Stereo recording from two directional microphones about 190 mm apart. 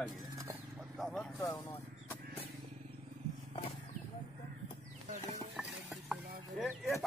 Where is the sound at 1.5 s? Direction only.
15° left (ahead or behind).